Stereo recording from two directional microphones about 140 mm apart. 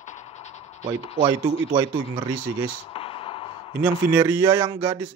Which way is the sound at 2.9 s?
40° left (ahead or behind).